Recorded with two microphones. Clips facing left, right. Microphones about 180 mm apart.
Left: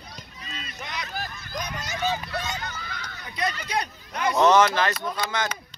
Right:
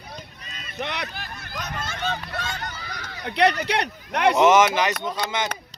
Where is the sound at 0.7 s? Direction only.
65° right (ahead or behind).